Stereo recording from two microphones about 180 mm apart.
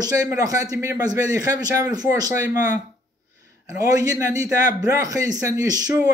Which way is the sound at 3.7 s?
20° right (ahead or behind).